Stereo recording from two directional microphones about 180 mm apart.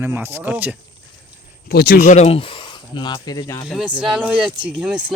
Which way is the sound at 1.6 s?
55° left (ahead or behind).